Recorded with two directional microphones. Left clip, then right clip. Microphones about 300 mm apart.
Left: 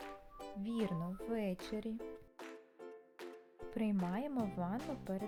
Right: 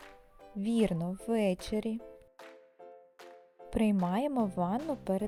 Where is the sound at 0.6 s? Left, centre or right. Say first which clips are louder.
Right 10 dB; centre.